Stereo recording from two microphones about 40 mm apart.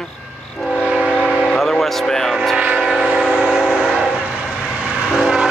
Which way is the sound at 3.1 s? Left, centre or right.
Centre.